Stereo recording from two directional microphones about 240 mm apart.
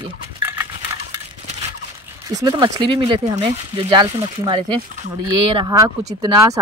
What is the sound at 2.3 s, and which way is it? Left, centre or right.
Speech, centre.